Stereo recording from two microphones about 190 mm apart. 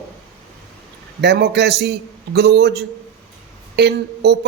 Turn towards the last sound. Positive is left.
turn(degrees=-60)  # may be behind; listen again after turning